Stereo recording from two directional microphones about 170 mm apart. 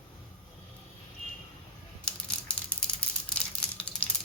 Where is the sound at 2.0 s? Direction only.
5° left (ahead or behind).